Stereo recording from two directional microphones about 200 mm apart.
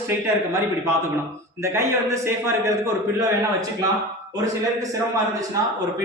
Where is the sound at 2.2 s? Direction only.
15° right (ahead or behind).